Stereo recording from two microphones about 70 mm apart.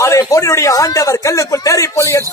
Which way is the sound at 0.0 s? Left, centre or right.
Left.